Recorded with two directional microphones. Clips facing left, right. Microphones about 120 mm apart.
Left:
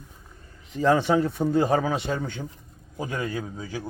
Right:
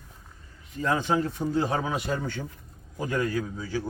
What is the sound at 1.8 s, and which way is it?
Speech, 35° left (ahead or behind).